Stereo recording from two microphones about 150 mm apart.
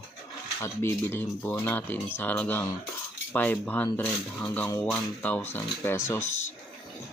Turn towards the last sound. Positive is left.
turn(degrees=15)  # may be behind; listen again after turning